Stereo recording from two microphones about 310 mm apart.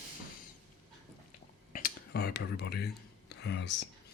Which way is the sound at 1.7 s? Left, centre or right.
Left.